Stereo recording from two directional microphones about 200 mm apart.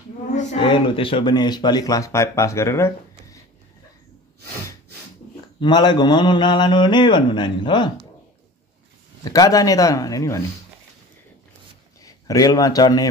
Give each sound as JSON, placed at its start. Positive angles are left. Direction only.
{"t": 0.6, "sound": "speech", "side_deg": 25}
{"t": 5.6, "sound": "speech", "side_deg": 20}
{"t": 9.2, "sound": "speech", "side_deg": 20}
{"t": 12.0, "sound": "a man's voice", "side_deg": 15}